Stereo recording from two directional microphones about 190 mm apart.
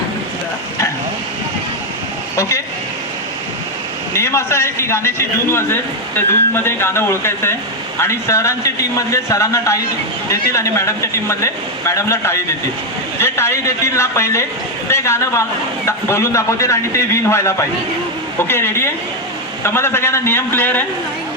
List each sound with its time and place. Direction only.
2.3 s speech: 15° left (ahead or behind)
4.1 s a man's voice: 15° left (ahead or behind)